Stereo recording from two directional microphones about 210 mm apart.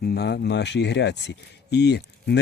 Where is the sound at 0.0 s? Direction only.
50° left (ahead or behind).